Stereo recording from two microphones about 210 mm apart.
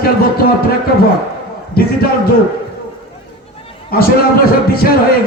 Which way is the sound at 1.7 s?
45° left (ahead or behind).